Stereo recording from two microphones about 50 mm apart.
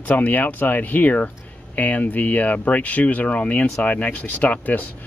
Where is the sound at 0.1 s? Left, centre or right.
Left.